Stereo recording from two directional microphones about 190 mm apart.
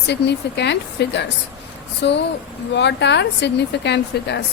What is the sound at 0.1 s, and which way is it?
A woman's voice, 65° left (ahead or behind).